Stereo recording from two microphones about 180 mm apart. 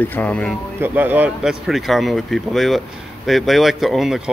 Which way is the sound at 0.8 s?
10° right (ahead or behind).